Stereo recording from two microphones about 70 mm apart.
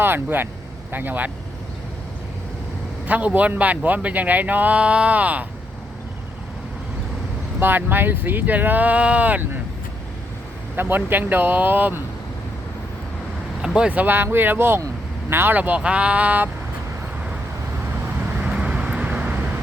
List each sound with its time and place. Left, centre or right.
0.0 s speech: right
3.1 s a man's voice: right
7.6 s a man's voice: right
10.8 s a man's voice: right
13.6 s vehicle: centre
13.9 s a man's voice: right
18.3 s vehicle: centre